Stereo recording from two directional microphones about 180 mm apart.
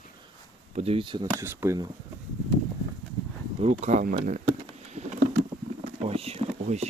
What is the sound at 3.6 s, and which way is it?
Speech, 40° right (ahead or behind).